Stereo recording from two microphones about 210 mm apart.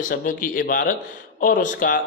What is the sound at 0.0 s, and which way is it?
A man's voice, 40° left (ahead or behind).